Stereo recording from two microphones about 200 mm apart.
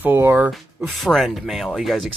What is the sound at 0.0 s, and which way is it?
Speech, 10° right (ahead or behind).